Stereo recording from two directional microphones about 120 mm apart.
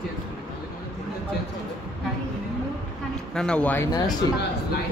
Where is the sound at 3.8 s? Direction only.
30° left (ahead or behind).